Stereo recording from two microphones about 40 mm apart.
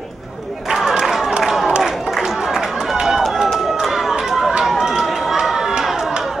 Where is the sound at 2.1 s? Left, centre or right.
Centre.